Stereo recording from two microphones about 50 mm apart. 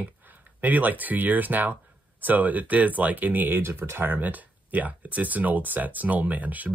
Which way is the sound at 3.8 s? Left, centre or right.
Right.